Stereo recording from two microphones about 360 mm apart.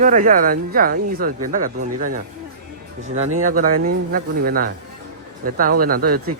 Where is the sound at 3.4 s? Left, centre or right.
Right.